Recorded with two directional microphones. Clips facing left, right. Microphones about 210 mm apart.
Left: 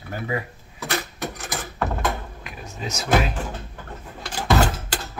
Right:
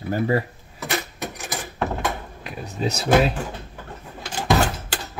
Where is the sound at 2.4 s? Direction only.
35° right (ahead or behind).